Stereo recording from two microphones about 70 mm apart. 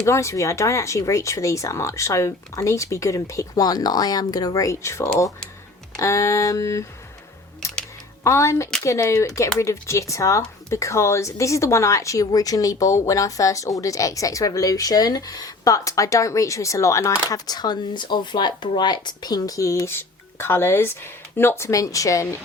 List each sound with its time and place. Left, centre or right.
0.0 s speech: left
8.2 s speech: left
17.2 s speech: left
19.9 s speech: left
21.7 s speech: left